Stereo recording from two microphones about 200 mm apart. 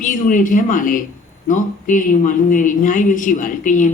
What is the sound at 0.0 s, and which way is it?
Speech, 40° left (ahead or behind).